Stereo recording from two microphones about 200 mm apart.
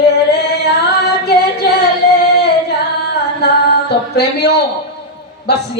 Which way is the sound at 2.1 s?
50° left (ahead or behind).